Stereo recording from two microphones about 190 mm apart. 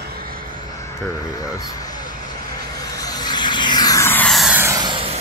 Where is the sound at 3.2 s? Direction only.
20° left (ahead or behind); by 4.7 s 5° right (ahead or behind).